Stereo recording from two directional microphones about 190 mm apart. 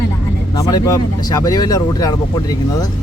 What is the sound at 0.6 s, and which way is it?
Speech, 20° left (ahead or behind).